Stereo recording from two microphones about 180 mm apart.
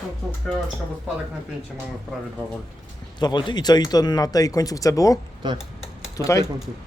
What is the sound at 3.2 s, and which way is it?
Speech, 25° left (ahead or behind).